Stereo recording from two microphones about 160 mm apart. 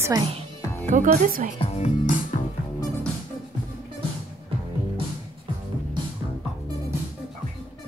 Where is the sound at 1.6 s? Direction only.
45° left (ahead or behind).